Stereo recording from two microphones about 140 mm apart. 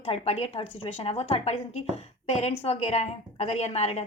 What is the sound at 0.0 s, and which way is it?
A woman's voice, 45° left (ahead or behind).